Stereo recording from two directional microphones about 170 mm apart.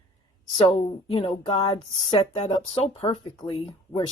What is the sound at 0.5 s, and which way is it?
Speech, 30° left (ahead or behind).